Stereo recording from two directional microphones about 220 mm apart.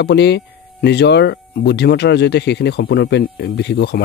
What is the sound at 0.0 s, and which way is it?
Speech, 50° left (ahead or behind).